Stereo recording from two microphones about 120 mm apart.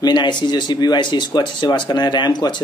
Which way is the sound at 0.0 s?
40° left (ahead or behind).